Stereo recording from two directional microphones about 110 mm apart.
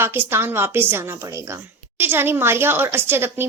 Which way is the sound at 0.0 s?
20° right (ahead or behind).